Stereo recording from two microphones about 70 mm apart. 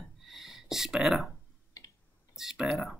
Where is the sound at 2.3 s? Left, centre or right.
Centre.